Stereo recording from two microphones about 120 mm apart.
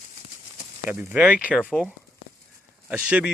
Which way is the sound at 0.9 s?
15° right (ahead or behind).